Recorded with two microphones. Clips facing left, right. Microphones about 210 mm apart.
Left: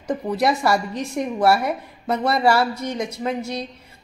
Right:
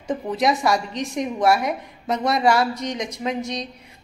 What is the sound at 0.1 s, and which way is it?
A woman's voice, centre (ahead or behind).